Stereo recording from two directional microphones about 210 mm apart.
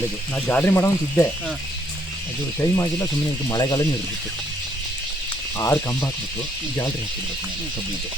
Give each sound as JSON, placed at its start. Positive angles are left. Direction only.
{"t": 0.4, "sound": "speech", "side_deg": 10}
{"t": 2.6, "sound": "speech", "side_deg": 15}
{"t": 5.5, "sound": "speech", "side_deg": 15}